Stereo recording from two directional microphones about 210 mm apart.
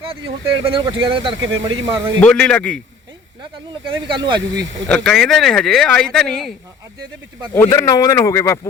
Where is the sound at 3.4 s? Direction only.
20° right (ahead or behind).